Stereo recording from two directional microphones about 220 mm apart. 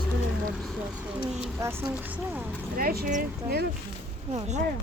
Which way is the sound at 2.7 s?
45° right (ahead or behind).